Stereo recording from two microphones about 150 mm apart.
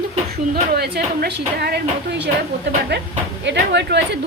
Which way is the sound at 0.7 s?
90° right.